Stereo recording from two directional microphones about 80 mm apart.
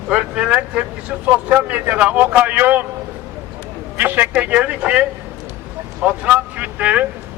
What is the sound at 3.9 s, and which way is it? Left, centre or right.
A man's voice, right.